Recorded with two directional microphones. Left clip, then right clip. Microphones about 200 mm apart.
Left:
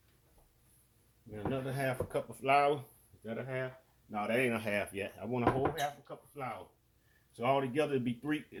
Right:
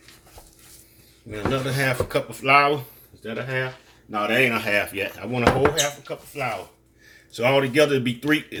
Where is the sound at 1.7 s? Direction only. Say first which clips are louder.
Right 11 dB; 30° left (ahead or behind); by 5.2 s 45° left (ahead or behind).